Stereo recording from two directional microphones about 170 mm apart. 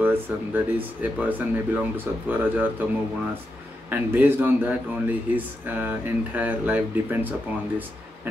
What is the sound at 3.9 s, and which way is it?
Speech, 10° right (ahead or behind).